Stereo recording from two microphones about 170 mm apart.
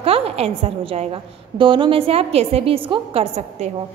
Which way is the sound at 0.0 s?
35° right (ahead or behind).